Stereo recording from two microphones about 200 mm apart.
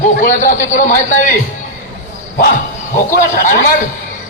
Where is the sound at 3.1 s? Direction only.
40° left (ahead or behind).